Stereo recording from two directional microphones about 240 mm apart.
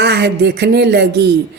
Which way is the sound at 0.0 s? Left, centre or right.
Right.